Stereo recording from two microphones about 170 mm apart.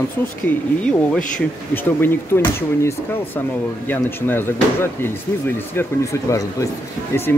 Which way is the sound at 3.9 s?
10° left (ahead or behind).